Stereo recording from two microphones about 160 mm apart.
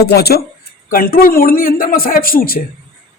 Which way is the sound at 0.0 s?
85° left.